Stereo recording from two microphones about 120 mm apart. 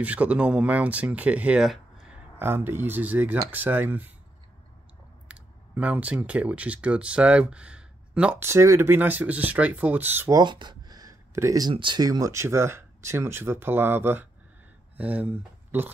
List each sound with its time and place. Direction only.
0.0 s speech: 10° right (ahead or behind)
2.3 s speech: 20° right (ahead or behind)
5.3 s speech: 10° right (ahead or behind)
8.5 s speech: 20° right (ahead or behind)
10.3 s a sound: 40° right (ahead or behind)
11.7 s speech: 40° right (ahead or behind); by 15.2 s 10° right (ahead or behind)